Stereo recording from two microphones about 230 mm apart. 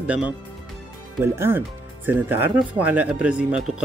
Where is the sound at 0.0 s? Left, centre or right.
Centre.